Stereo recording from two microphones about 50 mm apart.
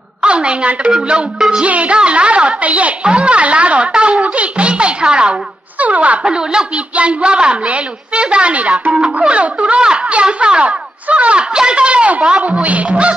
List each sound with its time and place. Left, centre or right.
0.2 s a woman's voice: right
6.2 s a woman's voice: centre